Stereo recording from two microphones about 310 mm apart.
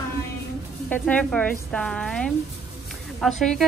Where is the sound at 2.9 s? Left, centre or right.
Centre.